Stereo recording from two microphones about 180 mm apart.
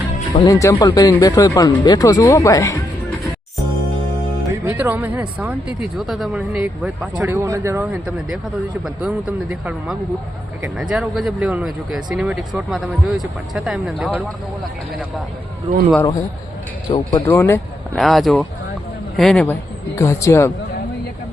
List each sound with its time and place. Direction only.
0.4 s speech: 20° left (ahead or behind)
4.5 s speech: 10° right (ahead or behind)
16.0 s speech: 20° left (ahead or behind)
17.2 s speech: 15° left (ahead or behind)
17.9 s speech: centre (ahead or behind)
20.0 s speech: 15° left (ahead or behind)